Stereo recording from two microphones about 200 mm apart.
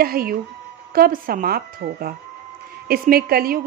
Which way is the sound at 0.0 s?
45° right (ahead or behind).